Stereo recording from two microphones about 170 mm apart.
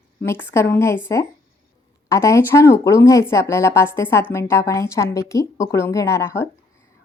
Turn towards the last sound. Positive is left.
turn(degrees=15)  # may be behind; listen again after turning